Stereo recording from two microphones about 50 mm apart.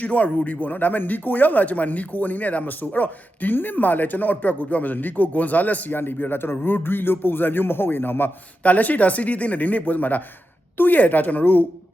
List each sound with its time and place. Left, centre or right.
0.0 s speech: left
6.0 s a man's voice: left
8.6 s speech: left